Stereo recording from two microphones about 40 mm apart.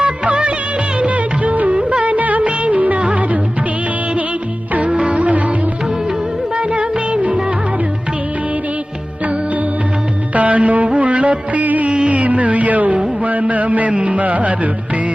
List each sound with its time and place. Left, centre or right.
0.0 s music of bollywood: right
3.0 s music: right
4.9 s music: right
6.6 s music: right
10.3 s music: right